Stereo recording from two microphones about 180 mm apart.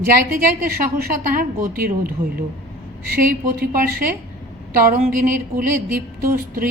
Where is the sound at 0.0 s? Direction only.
55° right (ahead or behind).